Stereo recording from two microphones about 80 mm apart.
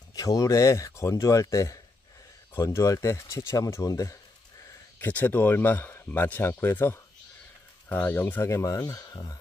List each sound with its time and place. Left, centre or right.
0.1 s speech: left
4.9 s speech: left
8.5 s speech: left